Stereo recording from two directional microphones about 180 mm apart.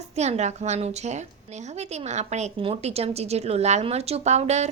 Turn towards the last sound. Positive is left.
turn(degrees=-40)  # may be behind; listen again after turning